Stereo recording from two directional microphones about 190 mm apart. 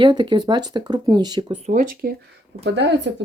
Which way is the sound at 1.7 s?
45° right (ahead or behind).